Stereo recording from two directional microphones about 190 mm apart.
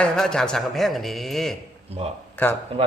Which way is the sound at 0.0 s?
5° left (ahead or behind).